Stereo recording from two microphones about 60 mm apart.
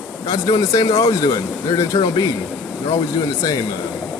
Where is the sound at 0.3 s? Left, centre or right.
Left.